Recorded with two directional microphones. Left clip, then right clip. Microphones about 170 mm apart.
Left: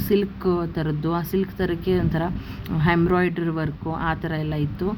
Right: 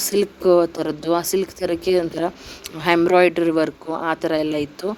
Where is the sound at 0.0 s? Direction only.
45° right (ahead or behind).